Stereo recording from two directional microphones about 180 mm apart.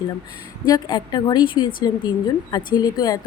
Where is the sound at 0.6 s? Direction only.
20° left (ahead or behind).